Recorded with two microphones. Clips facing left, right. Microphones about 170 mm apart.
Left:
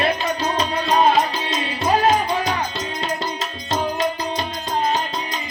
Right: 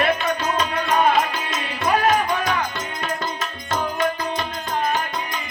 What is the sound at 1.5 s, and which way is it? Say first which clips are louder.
Music: left 2 dB; 20° left (ahead or behind).